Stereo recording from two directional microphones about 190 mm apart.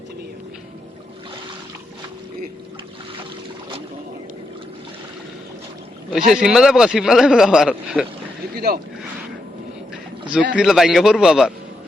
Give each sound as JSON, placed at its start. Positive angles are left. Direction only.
{"t": 6.1, "sound": "speech", "side_deg": -5}
{"t": 8.5, "sound": "speech", "side_deg": -55}
{"t": 10.5, "sound": "speech", "side_deg": 0}